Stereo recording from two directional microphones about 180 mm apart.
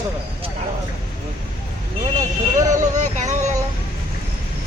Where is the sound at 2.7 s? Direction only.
40° right (ahead or behind).